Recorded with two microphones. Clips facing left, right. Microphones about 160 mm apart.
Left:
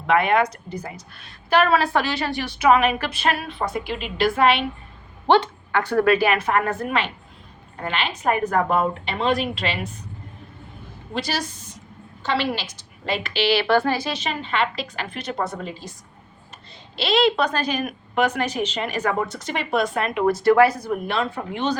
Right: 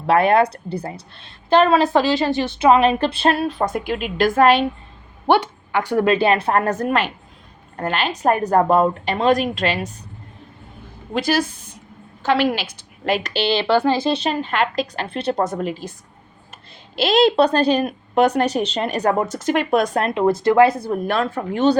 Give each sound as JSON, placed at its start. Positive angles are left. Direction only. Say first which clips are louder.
{"t": 0.1, "sound": "a woman's voice", "louder": "right 4 dB", "side_deg": -35}
{"t": 3.8, "sound": "speech", "louder": "right 4 dB", "side_deg": -50}
{"t": 5.2, "sound": "a woman's voice", "louder": "right 1 dB", "side_deg": -15}
{"t": 11.1, "sound": "a woman's voice", "louder": "right 7 dB", "side_deg": -50}
{"t": 13.1, "sound": "a woman's voice", "louder": "right 2 dB", "side_deg": -40}
{"t": 14.0, "sound": "a woman's voice", "louder": "right 7 dB", "side_deg": -35}
{"t": 17.0, "sound": "a woman's voice", "louder": "right 5 dB", "side_deg": -45}
{"t": 21.1, "sound": "speech", "louder": "right 4 dB", "side_deg": -50}